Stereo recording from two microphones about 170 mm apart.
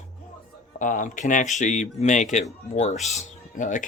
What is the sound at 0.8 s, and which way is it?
Speech, 50° left (ahead or behind).